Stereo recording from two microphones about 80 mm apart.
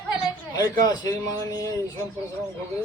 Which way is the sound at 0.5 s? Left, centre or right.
Left.